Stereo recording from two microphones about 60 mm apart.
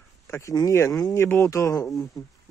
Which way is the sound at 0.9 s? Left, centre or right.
Left.